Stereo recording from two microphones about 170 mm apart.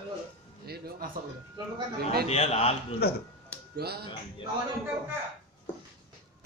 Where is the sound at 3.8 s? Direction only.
70° right (ahead or behind).